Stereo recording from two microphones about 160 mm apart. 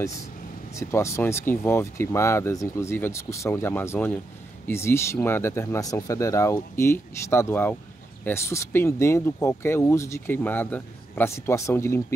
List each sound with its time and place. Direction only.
0.7 s speech: 15° left (ahead or behind)